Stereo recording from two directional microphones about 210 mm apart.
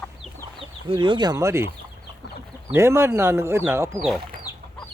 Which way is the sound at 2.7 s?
10° right (ahead or behind).